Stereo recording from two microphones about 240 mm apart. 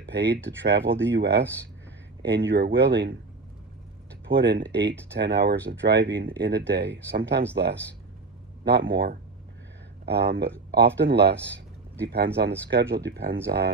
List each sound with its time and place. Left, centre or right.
0.0 s speech: right
4.3 s speech: right
8.6 s speech: right